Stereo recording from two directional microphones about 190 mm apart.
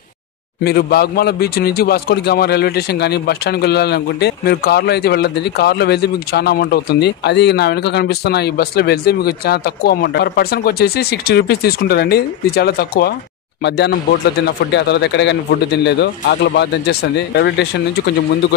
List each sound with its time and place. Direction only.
0.7 s a man's voice: 55° left (ahead or behind)